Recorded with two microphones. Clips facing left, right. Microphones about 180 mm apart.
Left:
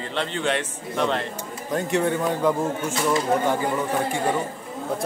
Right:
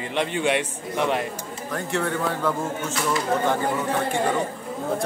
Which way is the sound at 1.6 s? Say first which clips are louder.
Left 4 dB; 20° left (ahead or behind).